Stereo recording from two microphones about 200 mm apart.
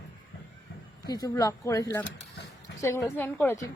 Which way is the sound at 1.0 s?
20° left (ahead or behind).